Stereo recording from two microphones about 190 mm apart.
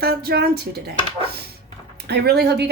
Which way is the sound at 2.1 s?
60° right (ahead or behind).